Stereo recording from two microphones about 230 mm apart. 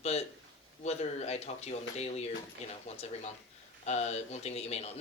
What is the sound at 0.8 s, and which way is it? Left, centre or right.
Speech, left.